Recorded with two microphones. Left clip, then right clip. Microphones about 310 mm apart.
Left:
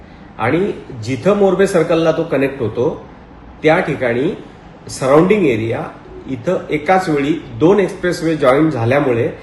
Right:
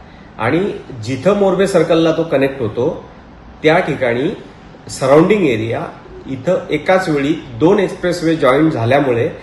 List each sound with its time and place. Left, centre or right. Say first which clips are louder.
0.3 s a man's voice: even; centre